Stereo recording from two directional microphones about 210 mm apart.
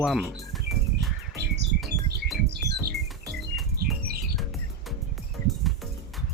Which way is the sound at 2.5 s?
50° right (ahead or behind).